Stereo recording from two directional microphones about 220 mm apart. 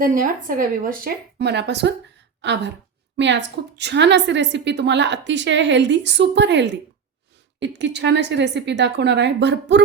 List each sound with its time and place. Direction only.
0.0 s a woman's voice: 40° right (ahead or behind)